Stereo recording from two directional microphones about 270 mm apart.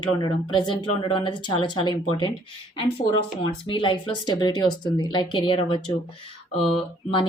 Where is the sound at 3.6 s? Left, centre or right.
Centre.